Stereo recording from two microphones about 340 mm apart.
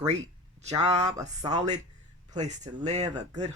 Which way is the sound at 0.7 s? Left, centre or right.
Centre.